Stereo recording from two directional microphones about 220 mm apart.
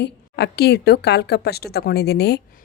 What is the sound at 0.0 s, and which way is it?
A woman's voice, 45° left (ahead or behind).